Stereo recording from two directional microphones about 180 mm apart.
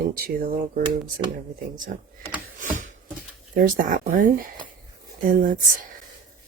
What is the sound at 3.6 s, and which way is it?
Speech, 50° right (ahead or behind).